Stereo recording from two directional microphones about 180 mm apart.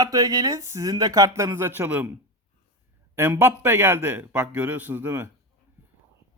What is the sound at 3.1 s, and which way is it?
A man's voice, 15° right (ahead or behind).